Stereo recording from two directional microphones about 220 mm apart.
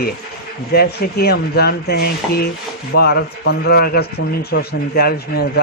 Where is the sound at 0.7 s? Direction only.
45° left (ahead or behind).